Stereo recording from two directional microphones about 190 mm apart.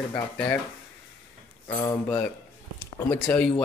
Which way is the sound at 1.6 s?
25° left (ahead or behind).